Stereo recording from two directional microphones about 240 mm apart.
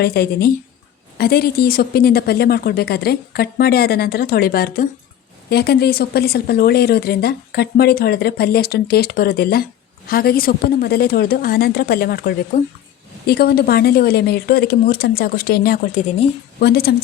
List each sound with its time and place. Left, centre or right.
0.0 s speech: left
13.2 s speech: left